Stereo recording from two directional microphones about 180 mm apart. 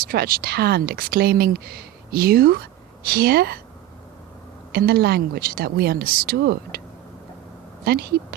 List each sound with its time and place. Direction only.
0.1 s speech: 55° right (ahead or behind)
4.7 s speech: 60° right (ahead or behind)
7.9 s speech: 60° right (ahead or behind)